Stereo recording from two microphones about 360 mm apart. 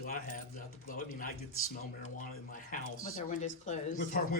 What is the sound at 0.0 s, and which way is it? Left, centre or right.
Speech, left.